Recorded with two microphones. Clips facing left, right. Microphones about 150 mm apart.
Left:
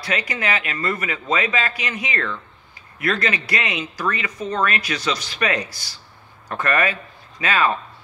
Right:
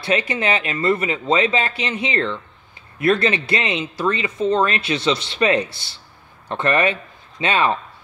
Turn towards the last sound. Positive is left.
turn(degrees=-25)  # may be behind; listen again after turning